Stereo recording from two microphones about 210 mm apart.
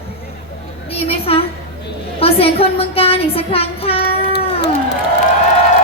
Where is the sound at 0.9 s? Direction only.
25° left (ahead or behind).